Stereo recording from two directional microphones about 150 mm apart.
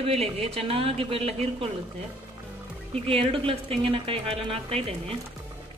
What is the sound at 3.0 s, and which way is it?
Speech, 35° right (ahead or behind).